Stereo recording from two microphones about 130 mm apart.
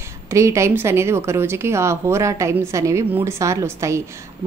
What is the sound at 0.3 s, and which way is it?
A woman's voice, 20° right (ahead or behind).